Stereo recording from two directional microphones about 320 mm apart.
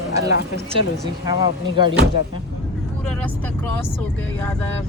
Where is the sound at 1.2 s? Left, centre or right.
Centre.